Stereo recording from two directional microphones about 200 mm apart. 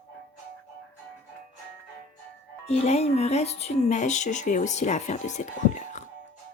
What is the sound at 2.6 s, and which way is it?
Speech, 30° left (ahead or behind).